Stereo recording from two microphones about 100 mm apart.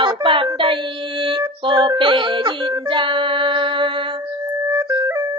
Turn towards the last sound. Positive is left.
turn(degrees=-30)  # may be behind; listen again after turning